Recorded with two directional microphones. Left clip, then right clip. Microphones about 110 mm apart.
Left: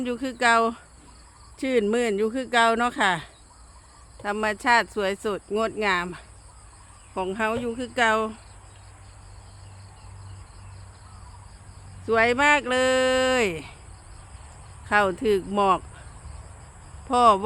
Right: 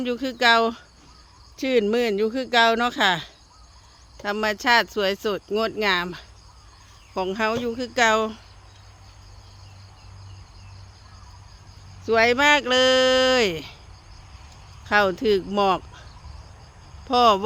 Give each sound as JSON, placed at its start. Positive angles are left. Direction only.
{"t": 0.0, "sound": "speech", "side_deg": -40}
{"t": 7.1, "sound": "speech", "side_deg": -70}
{"t": 12.0, "sound": "speech", "side_deg": -55}
{"t": 14.8, "sound": "speech", "side_deg": -40}
{"t": 17.1, "sound": "speech", "side_deg": -35}